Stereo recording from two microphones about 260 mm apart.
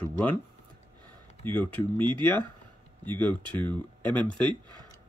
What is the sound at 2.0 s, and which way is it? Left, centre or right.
Speech, centre.